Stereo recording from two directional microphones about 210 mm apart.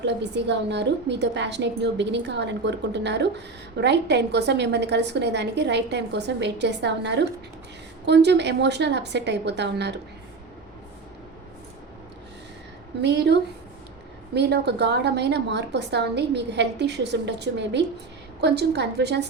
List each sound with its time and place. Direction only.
0.0 s a woman's voice: 55° right (ahead or behind)
13.0 s a woman's voice: 55° right (ahead or behind)